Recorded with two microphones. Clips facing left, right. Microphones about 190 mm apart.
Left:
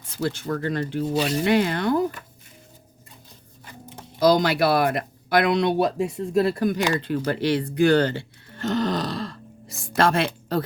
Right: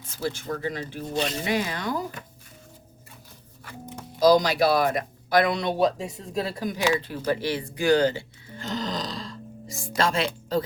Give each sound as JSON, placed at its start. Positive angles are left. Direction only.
{"t": 0.3, "sound": "speech", "side_deg": 60}
{"t": 4.2, "sound": "speech", "side_deg": 60}
{"t": 7.3, "sound": "grunt", "side_deg": 65}